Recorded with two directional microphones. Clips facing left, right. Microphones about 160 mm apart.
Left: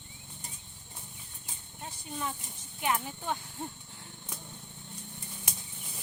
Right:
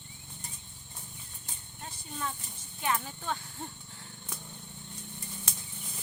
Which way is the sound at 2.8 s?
15° left (ahead or behind).